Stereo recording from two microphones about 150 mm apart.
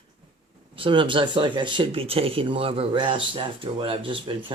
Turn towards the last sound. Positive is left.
turn(degrees=-35)  # may be behind; listen again after turning